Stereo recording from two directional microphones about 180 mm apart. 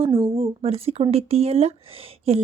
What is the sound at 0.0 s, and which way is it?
A woman's voice, 30° right (ahead or behind).